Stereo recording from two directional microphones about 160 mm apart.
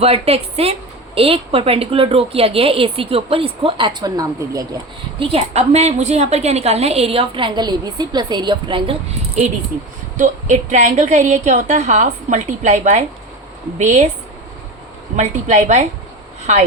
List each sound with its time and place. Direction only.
0.0 s a woman's voice: 40° right (ahead or behind); by 4.6 s 25° right (ahead or behind)
5.2 s a woman's voice: 35° right (ahead or behind)
10.2 s a woman's voice: 45° right (ahead or behind)
15.1 s a woman's voice: 45° right (ahead or behind)